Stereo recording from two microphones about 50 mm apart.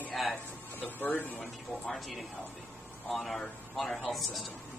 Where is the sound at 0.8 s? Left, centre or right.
Left.